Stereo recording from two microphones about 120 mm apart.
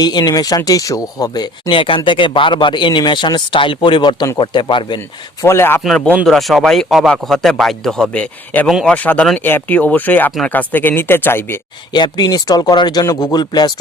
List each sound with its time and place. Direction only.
0.0 s speech: 35° left (ahead or behind)
1.7 s speech: 45° left (ahead or behind)
5.4 s speech: 20° left (ahead or behind)
6.2 s speech: centre (ahead or behind); by 11.6 s 20° left (ahead or behind)
11.9 s speech: 40° left (ahead or behind)